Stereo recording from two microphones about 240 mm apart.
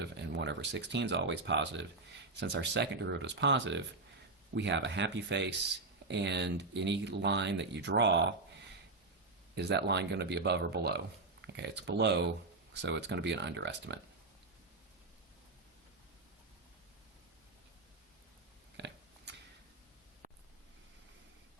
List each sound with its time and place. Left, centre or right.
0.0 s speech: right
9.6 s speech: right
18.8 s a sound: right